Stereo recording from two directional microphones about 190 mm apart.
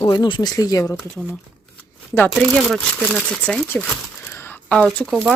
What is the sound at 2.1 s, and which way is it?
Speech, 5° left (ahead or behind).